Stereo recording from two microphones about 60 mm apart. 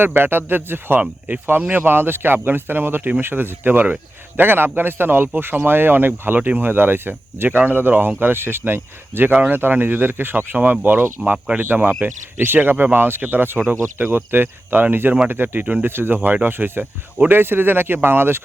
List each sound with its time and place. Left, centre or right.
0.0 s speech: right